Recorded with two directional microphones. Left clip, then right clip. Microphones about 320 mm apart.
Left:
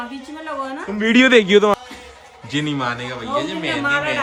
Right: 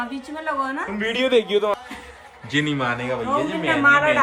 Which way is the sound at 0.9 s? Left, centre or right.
Left.